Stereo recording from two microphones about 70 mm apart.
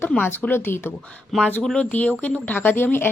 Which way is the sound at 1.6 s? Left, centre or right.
Centre.